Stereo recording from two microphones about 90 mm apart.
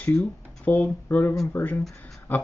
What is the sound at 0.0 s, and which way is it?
Speech, 20° left (ahead or behind).